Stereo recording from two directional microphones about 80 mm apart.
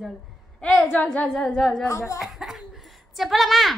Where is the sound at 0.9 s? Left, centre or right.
Centre.